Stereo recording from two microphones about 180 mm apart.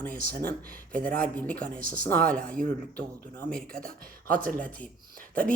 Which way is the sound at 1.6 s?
50° right (ahead or behind).